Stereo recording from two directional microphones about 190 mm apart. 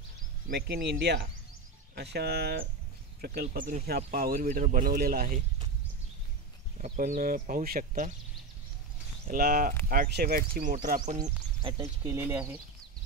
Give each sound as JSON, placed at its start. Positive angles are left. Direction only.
{"t": 0.5, "sound": "speech", "side_deg": -55}
{"t": 6.8, "sound": "speech", "side_deg": -45}
{"t": 9.3, "sound": "speech", "side_deg": -45}
{"t": 11.1, "sound": "speech", "side_deg": -25}
{"t": 12.0, "sound": "speech", "side_deg": -15}